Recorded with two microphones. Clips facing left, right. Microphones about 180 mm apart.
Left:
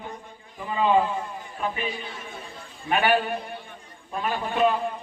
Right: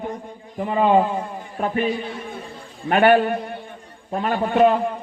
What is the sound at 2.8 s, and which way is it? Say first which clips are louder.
A man's voice: right 7 dB; 55° right (ahead or behind).